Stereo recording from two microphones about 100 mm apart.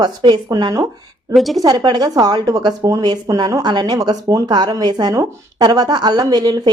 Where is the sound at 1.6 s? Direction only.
45° right (ahead or behind).